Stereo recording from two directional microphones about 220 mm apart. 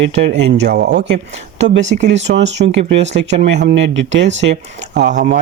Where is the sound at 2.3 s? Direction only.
55° right (ahead or behind).